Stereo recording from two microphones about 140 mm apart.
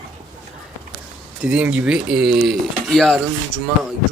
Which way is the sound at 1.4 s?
5° right (ahead or behind).